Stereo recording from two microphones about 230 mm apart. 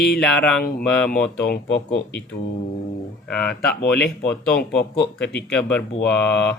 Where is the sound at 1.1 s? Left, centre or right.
Left.